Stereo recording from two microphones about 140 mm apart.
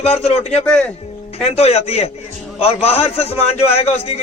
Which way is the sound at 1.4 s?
50° left (ahead or behind).